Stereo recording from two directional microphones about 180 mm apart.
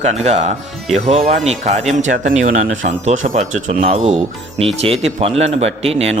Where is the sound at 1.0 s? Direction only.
40° right (ahead or behind).